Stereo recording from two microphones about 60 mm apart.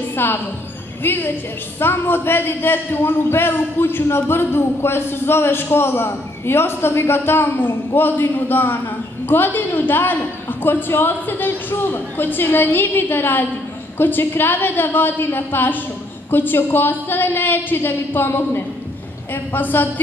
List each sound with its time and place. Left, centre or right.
0.1 s a woman's voice: left